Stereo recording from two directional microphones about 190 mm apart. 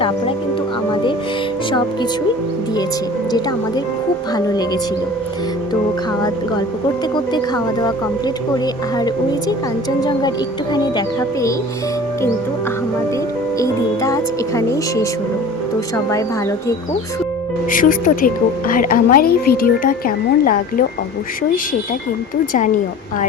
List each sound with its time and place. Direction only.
4.4 s speech: 20° left (ahead or behind)
7.3 s speech: 20° left (ahead or behind)
13.6 s speech: 15° left (ahead or behind)
16.0 s speech: 15° left (ahead or behind)
17.7 s speech: 45° left (ahead or behind)
22.5 s a woman's voice: 40° left (ahead or behind)